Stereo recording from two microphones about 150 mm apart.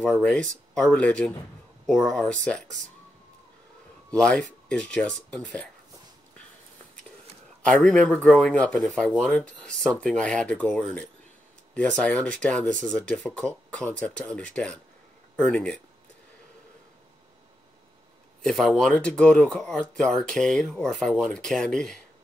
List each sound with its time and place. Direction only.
0.0 s speech: 10° left (ahead or behind)
4.1 s speech: 5° left (ahead or behind)
7.6 s speech: 5° left (ahead or behind)
18.4 s speech: centre (ahead or behind)